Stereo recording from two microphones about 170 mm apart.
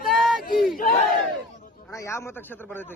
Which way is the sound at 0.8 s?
50° left (ahead or behind).